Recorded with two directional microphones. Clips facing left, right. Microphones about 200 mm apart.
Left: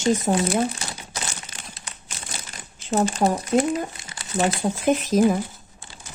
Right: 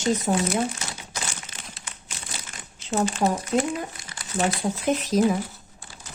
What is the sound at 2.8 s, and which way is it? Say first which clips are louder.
Speech: left 2 dB; 40° left (ahead or behind).